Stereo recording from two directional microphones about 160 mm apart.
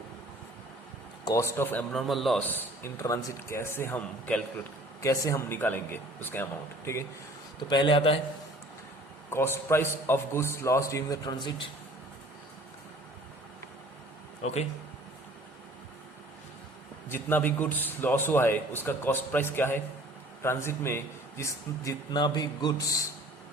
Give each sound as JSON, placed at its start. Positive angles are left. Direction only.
{"t": 1.2, "sound": "a man's voice", "side_deg": 20}
{"t": 1.9, "sound": "a man's voice", "side_deg": 0}
{"t": 2.5, "sound": "a man's voice", "side_deg": 15}
{"t": 4.9, "sound": "a man's voice", "side_deg": 20}
{"t": 7.7, "sound": "a man's voice", "side_deg": 30}
{"t": 9.3, "sound": "a man's voice", "side_deg": 15}
{"t": 14.4, "sound": "speech", "side_deg": 45}
{"t": 17.1, "sound": "a man's voice", "side_deg": 15}